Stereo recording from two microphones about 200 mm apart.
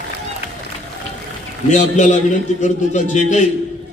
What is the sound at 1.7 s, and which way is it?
A man's voice, 35° left (ahead or behind).